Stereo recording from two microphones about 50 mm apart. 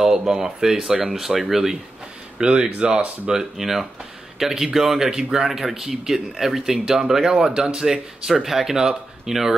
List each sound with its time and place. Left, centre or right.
0.0 s speech: centre
2.3 s speech: centre